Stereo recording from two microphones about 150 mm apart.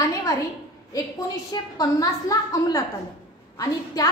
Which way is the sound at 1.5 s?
25° left (ahead or behind).